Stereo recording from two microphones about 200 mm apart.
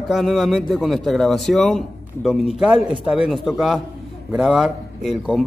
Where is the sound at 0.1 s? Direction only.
Centre (ahead or behind).